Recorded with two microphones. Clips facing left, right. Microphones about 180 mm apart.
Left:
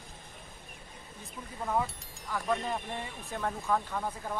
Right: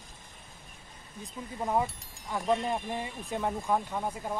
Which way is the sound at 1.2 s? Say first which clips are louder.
Right 4 dB; 20° right (ahead or behind).